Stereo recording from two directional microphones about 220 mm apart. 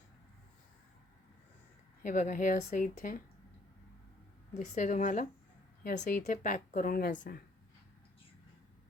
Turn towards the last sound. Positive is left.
turn(degrees=40)  # may be behind; listen again after turning